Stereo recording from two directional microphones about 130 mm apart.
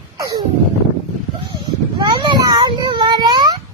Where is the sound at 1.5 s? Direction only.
35° right (ahead or behind).